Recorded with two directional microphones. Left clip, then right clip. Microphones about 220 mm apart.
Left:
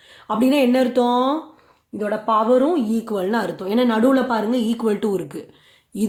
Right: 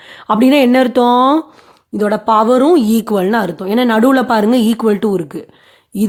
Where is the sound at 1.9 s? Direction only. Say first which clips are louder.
Right 7 dB; 50° right (ahead or behind).